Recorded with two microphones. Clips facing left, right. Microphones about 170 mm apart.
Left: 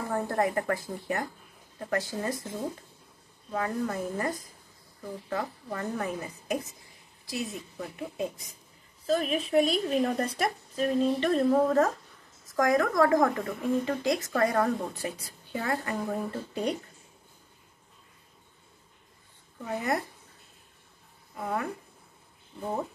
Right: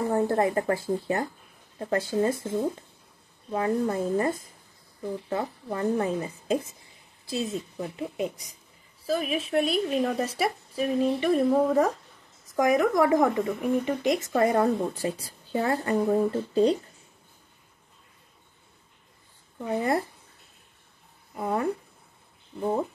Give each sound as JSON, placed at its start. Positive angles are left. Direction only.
{"t": 0.1, "sound": "speech", "side_deg": -25}
{"t": 3.5, "sound": "speech", "side_deg": -25}
{"t": 9.0, "sound": "a woman's voice", "side_deg": -5}
{"t": 19.8, "sound": "speech", "side_deg": -30}
{"t": 21.4, "sound": "speech", "side_deg": -25}